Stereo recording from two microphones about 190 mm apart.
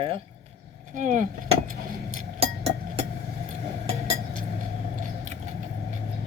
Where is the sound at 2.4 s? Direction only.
30° right (ahead or behind).